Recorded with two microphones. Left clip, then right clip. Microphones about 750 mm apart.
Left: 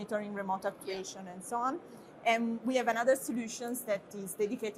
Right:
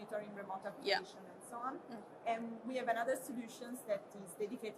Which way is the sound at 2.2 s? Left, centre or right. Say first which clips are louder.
Left 10 dB; left.